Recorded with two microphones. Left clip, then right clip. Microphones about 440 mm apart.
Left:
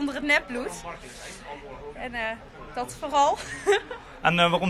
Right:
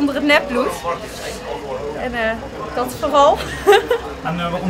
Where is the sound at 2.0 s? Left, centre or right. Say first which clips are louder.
Right 9 dB; left.